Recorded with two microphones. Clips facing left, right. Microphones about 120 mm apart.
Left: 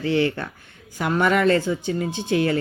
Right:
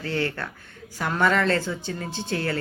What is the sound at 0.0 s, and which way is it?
Speech, 15° left (ahead or behind).